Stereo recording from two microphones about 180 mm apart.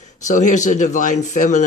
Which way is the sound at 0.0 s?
45° left (ahead or behind).